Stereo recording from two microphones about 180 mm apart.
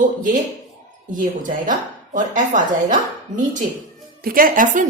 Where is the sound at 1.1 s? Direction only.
45° right (ahead or behind).